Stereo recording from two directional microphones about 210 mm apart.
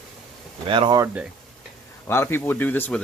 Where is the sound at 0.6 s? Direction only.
25° right (ahead or behind).